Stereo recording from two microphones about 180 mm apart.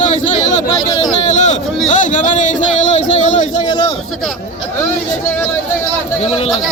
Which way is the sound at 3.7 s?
25° left (ahead or behind).